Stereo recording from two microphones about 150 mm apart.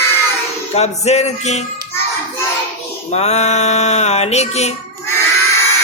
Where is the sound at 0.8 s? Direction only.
45° left (ahead or behind).